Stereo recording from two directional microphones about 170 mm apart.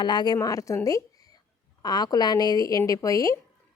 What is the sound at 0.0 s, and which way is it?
A woman's voice, 25° left (ahead or behind).